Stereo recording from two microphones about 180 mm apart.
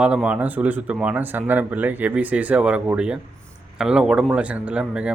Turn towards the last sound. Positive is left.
turn(degrees=-5)  # may be behind; listen again after turning